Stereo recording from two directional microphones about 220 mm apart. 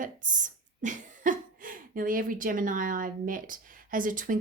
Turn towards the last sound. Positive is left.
turn(degrees=-40)  # may be behind; listen again after turning